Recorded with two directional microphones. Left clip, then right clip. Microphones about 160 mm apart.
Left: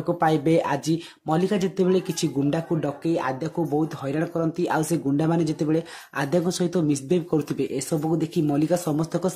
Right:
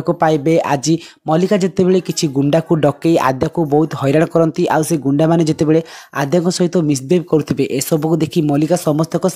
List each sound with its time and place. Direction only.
0.0 s speech: 45° right (ahead or behind)